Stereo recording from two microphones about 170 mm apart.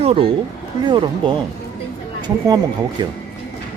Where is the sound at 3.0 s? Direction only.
25° right (ahead or behind).